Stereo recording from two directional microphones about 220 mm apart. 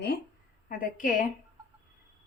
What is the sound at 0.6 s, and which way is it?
Speech, 35° left (ahead or behind).